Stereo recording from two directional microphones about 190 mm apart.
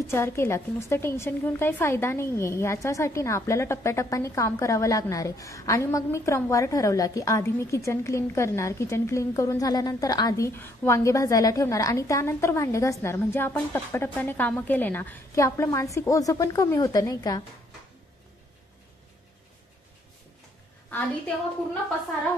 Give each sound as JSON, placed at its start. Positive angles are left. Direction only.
{"t": 0.1, "sound": "a woman's voice", "side_deg": 15}